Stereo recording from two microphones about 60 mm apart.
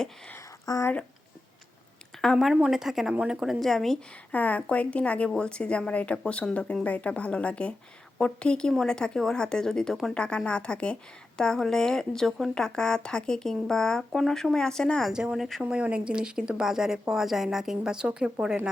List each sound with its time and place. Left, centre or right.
0.6 s speech: left
2.3 s a woman's voice: centre
3.6 s a woman's voice: centre
4.3 s a woman's voice: left; by 15.1 s centre
15.1 s speech: centre